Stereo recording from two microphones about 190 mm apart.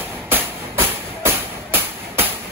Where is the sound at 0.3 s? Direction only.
10° right (ahead or behind).